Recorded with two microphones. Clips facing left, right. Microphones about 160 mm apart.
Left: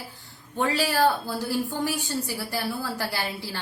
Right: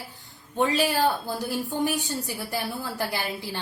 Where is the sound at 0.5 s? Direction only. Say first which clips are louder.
Right 1 dB; 20° right (ahead or behind).